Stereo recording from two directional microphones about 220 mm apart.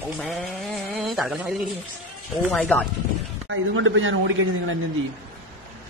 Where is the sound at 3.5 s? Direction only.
60° right (ahead or behind).